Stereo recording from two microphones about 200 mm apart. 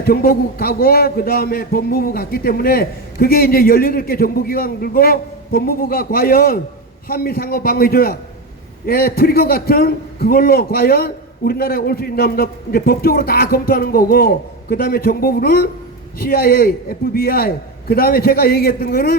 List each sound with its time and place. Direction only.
0.0 s a man's voice: 50° left (ahead or behind)